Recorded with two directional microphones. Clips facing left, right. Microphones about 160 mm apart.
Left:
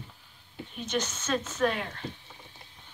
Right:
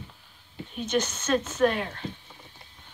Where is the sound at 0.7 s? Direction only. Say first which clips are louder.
Right 5 dB; centre (ahead or behind).